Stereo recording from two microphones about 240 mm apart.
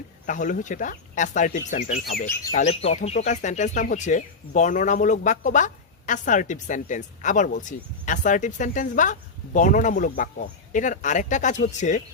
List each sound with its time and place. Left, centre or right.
0.3 s speech: left